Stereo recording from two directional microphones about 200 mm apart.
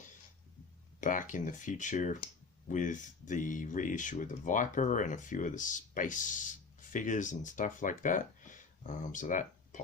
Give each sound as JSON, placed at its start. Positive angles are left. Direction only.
{"t": 1.3, "sound": "speech", "side_deg": 40}